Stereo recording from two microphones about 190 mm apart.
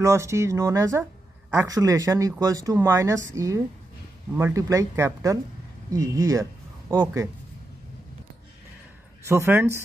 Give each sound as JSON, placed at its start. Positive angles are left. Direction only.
{"t": 0.0, "sound": "speech", "side_deg": -15}
{"t": 9.2, "sound": "speech", "side_deg": -15}